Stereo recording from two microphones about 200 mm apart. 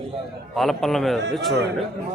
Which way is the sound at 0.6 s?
Centre (ahead or behind).